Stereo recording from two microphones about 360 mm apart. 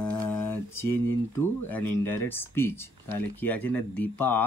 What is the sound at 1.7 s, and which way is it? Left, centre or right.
Speech, centre.